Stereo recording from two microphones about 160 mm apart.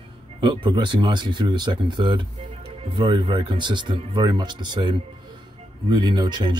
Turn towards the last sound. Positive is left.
turn(degrees=-25)  # may be behind; listen again after turning